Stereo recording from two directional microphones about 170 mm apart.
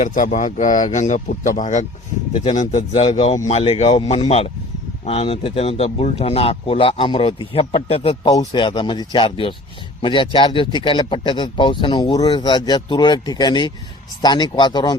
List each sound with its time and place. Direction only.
0.0 s speech: 50° left (ahead or behind)
2.3 s speech: 30° left (ahead or behind)
2.6 s speech: 40° left (ahead or behind); by 14.9 s 25° left (ahead or behind)